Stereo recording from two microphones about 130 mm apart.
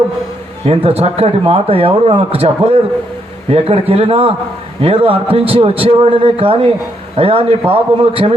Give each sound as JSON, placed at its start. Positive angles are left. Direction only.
{"t": 0.6, "sound": "speech", "side_deg": -50}